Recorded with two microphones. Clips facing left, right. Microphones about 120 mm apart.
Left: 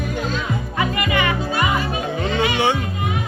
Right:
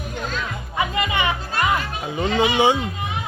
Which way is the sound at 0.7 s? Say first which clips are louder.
Left 1 dB; 20° right (ahead or behind).